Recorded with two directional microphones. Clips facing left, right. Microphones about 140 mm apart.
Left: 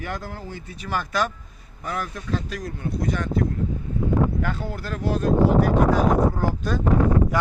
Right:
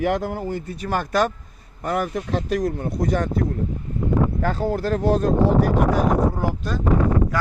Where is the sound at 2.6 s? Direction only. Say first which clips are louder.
Right 6 dB; 40° right (ahead or behind).